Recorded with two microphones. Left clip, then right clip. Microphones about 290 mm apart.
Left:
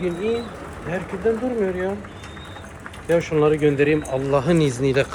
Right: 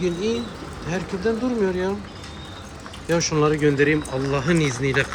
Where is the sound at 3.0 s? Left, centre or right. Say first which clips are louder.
Left 2 dB; centre.